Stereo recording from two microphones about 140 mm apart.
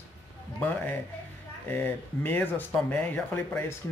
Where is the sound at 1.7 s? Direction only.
15° left (ahead or behind).